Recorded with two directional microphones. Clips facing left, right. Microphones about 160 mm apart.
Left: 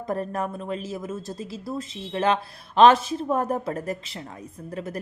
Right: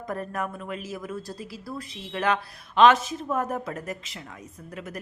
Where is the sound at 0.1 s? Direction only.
30° left (ahead or behind).